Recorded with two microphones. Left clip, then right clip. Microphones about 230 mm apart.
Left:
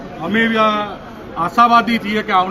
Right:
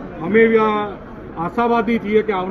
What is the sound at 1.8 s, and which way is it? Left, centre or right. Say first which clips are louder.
Speech: right 2 dB; left.